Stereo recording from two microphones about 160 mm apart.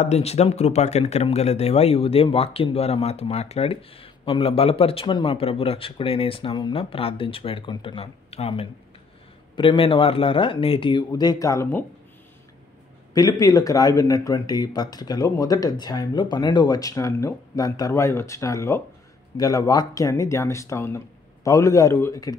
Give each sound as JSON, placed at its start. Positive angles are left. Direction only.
{"t": 0.0, "sound": "speech", "side_deg": 40}
{"t": 13.1, "sound": "speech", "side_deg": 25}